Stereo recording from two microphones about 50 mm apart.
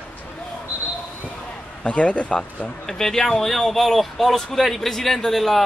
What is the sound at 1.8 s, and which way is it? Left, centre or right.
Speech, left.